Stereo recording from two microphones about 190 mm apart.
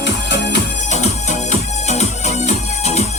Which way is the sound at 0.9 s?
35° left (ahead or behind).